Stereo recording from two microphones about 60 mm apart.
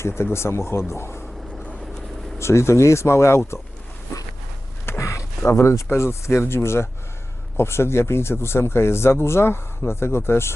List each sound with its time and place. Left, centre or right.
0.2 s speech: left
2.4 s speech: left
4.9 s a sound: left
5.5 s speech: left